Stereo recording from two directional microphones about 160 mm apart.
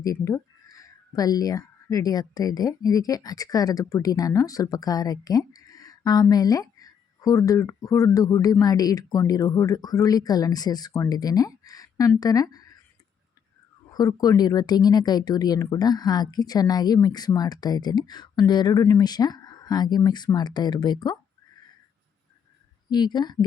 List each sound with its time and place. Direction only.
0.0 s speech: 20° left (ahead or behind)
13.9 s speech: 25° left (ahead or behind)
22.9 s speech: 25° left (ahead or behind)